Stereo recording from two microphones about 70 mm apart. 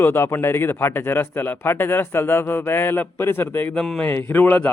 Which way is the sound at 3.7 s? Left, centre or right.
Centre.